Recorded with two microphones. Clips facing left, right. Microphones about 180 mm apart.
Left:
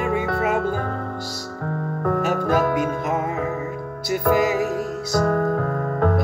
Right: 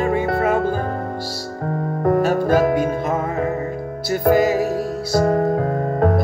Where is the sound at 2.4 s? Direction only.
25° right (ahead or behind).